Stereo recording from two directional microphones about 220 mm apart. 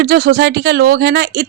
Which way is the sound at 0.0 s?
45° right (ahead or behind).